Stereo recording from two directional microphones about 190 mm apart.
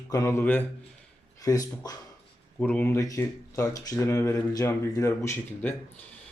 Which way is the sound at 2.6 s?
5° left (ahead or behind).